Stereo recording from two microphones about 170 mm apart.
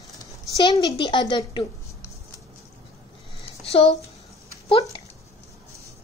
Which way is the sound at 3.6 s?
35° left (ahead or behind).